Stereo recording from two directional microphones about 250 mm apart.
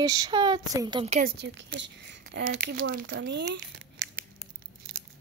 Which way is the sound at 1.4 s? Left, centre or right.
Right.